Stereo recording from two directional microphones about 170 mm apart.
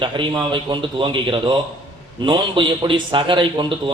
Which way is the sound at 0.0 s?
30° right (ahead or behind).